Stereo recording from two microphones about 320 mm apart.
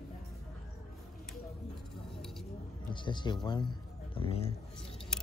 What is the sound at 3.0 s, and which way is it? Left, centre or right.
Speech, centre.